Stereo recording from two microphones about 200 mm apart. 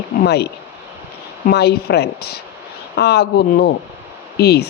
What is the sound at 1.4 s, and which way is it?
Speech, 55° left (ahead or behind).